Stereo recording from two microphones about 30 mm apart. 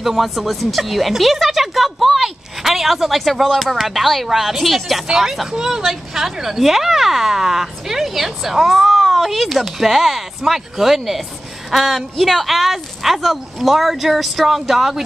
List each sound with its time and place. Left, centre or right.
0.2 s speech: centre
5.0 s speech: centre